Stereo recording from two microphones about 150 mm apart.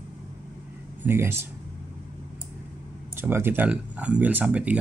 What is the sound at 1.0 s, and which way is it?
Speech, 15° right (ahead or behind).